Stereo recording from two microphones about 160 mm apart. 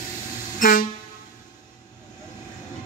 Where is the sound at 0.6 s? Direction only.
60° left (ahead or behind).